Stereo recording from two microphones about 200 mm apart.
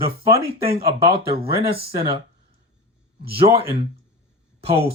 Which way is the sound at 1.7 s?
30° right (ahead or behind).